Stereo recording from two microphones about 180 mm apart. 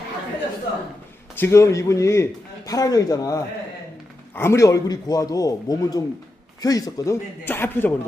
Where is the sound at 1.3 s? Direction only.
15° left (ahead or behind).